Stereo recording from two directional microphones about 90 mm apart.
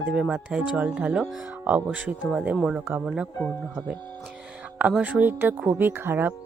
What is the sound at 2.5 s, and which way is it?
Speech, 5° right (ahead or behind).